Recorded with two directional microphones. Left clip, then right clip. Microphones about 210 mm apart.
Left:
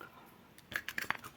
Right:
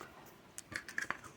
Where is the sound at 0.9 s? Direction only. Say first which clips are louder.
Even; 45° left (ahead or behind).